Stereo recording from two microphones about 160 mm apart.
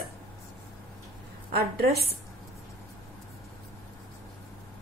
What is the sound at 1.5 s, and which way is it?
Speech, 75° right (ahead or behind).